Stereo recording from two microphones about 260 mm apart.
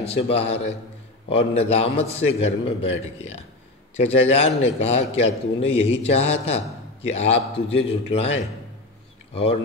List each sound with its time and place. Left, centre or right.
0.0 s a man's voice: left